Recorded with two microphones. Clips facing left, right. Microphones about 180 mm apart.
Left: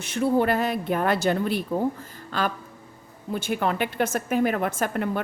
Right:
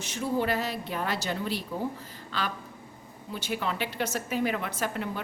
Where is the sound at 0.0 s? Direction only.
60° left (ahead or behind).